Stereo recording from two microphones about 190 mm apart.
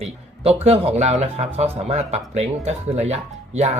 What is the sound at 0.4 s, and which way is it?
Speech, 30° right (ahead or behind).